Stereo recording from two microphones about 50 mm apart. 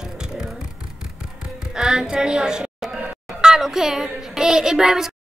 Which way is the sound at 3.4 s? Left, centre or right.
Centre.